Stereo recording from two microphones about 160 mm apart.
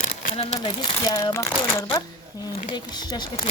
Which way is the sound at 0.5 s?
25° left (ahead or behind).